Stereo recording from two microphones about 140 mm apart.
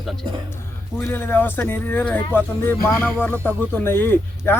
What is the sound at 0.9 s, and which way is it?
Speech, 15° left (ahead or behind).